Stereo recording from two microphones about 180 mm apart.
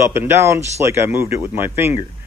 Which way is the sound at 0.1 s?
15° right (ahead or behind).